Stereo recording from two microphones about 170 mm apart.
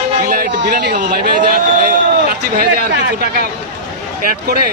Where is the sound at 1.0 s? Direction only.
50° right (ahead or behind).